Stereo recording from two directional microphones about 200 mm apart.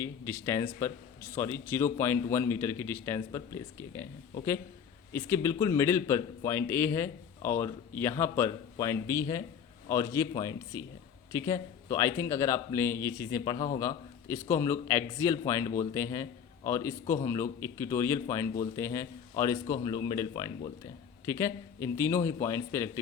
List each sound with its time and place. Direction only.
0.0 s a man's voice: 10° left (ahead or behind)
5.1 s a man's voice: 15° left (ahead or behind)